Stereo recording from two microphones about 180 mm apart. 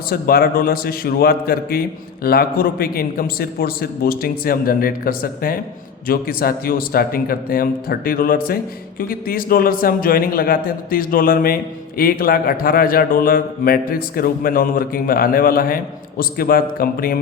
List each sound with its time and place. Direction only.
0.1 s a man's voice: 55° left (ahead or behind)